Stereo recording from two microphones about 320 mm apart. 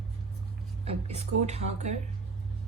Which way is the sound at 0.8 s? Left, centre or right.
Centre.